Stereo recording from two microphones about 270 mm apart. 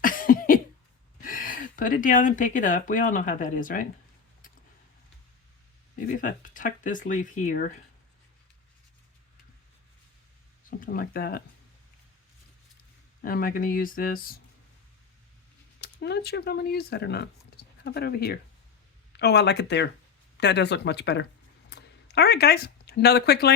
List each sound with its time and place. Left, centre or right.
0.0 s cough: left
1.2 s speech: left
6.1 s speech: left
10.7 s speech: left
13.2 s speech: left
15.8 s speech: left